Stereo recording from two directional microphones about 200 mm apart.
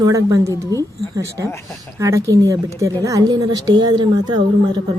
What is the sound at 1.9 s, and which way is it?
Speech, 15° right (ahead or behind).